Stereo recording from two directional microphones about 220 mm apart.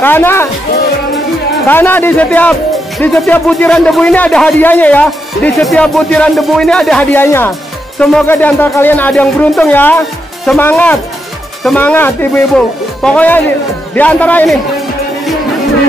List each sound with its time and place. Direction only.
0.0 s speech: 10° left (ahead or behind)
1.7 s speech: 10° left (ahead or behind)